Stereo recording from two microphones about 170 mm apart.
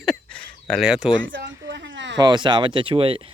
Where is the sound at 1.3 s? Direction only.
90° right.